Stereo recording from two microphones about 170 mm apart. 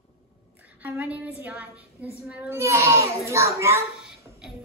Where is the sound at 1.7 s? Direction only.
15° left (ahead or behind).